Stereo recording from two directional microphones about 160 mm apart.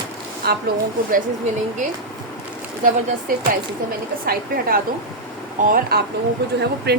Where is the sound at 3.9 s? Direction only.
65° right (ahead or behind).